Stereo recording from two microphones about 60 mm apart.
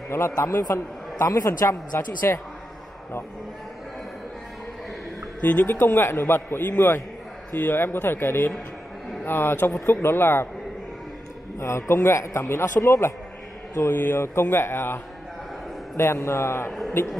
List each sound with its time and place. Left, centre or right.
0.1 s a man's voice: left
0.6 s a woman's voice: left
2.2 s a man's voice: left
5.4 s speech: left
5.7 s speech: left
11.6 s a man's voice: left
16.0 s a man's voice: left